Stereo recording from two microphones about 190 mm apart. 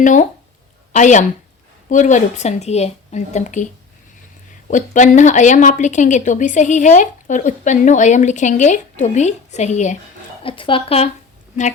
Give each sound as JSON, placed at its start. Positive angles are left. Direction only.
{"t": 0.0, "sound": "speech", "side_deg": 40}
{"t": 4.7, "sound": "speech", "side_deg": 40}
{"t": 10.4, "sound": "speech", "side_deg": 25}